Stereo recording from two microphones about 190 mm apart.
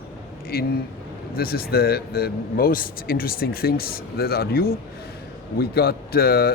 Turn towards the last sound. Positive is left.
turn(degrees=55)  # may be behind; listen again after turning